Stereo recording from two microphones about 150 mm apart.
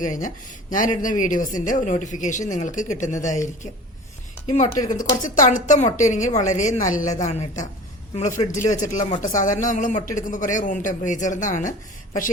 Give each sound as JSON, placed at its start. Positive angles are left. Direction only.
{"t": 0.0, "sound": "a woman's voice", "side_deg": 60}